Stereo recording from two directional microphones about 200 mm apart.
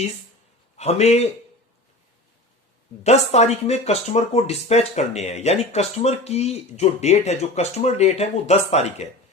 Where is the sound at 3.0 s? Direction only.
35° left (ahead or behind).